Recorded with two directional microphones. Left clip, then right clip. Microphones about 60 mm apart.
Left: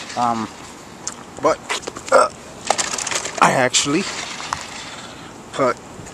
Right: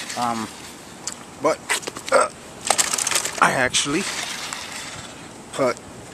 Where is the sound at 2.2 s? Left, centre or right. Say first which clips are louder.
Left 3 dB; centre.